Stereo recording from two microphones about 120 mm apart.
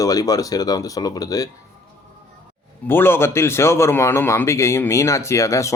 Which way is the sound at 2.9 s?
20° left (ahead or behind).